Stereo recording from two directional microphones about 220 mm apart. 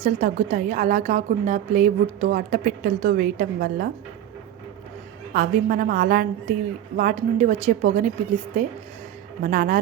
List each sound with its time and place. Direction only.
0.0 s a woman's voice: 35° right (ahead or behind)
5.3 s a woman's voice: 40° right (ahead or behind)
9.4 s a woman's voice: 40° right (ahead or behind)